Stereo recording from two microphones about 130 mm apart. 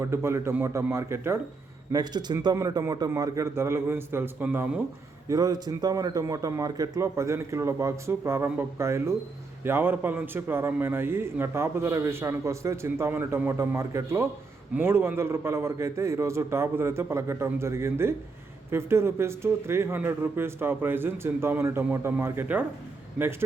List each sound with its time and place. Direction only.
0.0 s a man's voice: 20° right (ahead or behind)
1.9 s a man's voice: 30° right (ahead or behind); by 4.8 s 10° right (ahead or behind)
5.3 s a man's voice: 30° right (ahead or behind)